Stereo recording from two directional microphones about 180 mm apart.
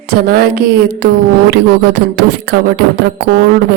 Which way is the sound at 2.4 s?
65° right (ahead or behind).